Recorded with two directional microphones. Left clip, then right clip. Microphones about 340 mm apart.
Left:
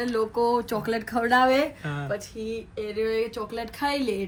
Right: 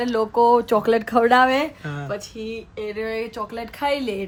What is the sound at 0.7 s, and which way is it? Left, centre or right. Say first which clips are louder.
Speech: right 9 dB; right.